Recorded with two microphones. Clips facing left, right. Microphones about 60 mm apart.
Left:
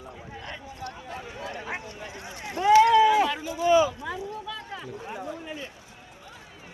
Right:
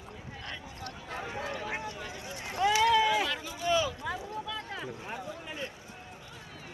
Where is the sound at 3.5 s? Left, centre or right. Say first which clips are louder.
Left 9 dB; centre.